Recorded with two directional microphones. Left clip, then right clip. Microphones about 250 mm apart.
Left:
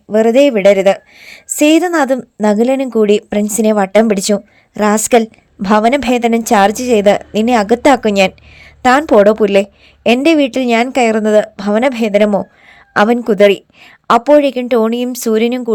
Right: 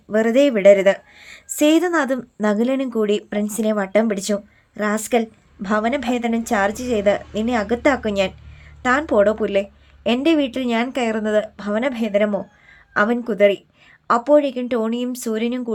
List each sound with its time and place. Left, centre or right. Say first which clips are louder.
0.1 s a woman's voice: left 7 dB; centre